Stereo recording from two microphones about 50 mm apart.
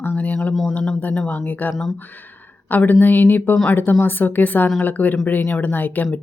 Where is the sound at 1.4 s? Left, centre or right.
Left.